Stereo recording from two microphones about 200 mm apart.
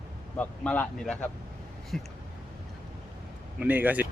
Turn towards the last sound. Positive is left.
turn(degrees=-10)  # may be behind; listen again after turning